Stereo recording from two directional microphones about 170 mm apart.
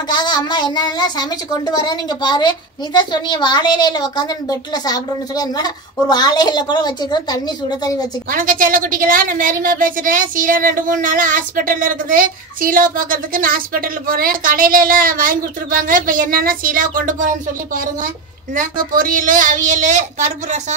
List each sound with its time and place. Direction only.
0.1 s speech: 25° left (ahead or behind)
8.3 s a woman's voice: 55° right (ahead or behind)